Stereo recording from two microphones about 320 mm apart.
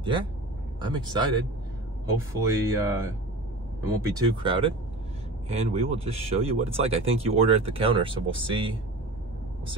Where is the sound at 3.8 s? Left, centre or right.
Centre.